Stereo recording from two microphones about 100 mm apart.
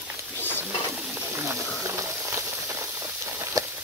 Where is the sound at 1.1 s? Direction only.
25° right (ahead or behind).